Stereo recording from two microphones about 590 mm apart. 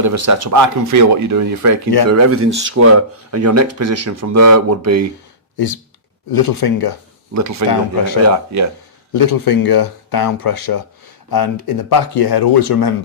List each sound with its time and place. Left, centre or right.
0.0 s speech: right
5.5 s speech: left
6.3 s speech: left
7.3 s speech: right
9.1 s speech: left